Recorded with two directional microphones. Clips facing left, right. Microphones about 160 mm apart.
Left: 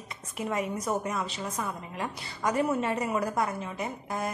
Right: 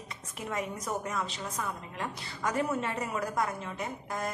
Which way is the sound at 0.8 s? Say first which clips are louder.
Left 3 dB; 20° left (ahead or behind).